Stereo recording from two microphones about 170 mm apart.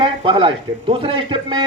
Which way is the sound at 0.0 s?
30° right (ahead or behind).